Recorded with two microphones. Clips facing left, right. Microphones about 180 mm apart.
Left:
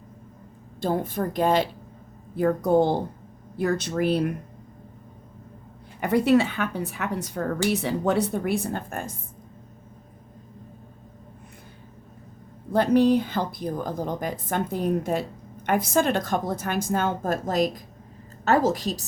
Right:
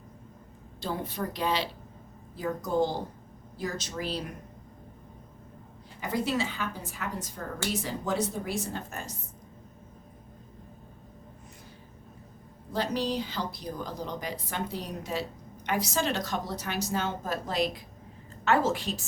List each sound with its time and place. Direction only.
0.8 s a woman's voice: 50° left (ahead or behind)
6.0 s a woman's voice: 65° left (ahead or behind)
12.7 s a woman's voice: 55° left (ahead or behind); by 19.0 s 40° left (ahead or behind)